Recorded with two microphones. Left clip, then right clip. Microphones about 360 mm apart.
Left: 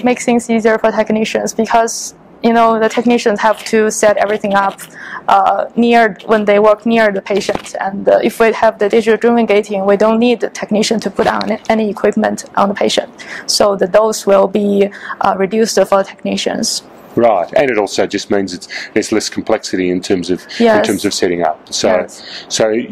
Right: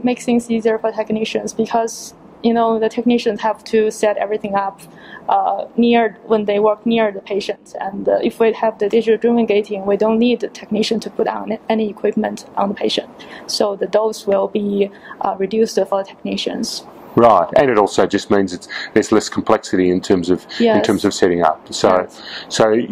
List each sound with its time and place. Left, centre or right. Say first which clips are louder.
0.0 s speech: left 5 dB; left
17.2 s speech: even; right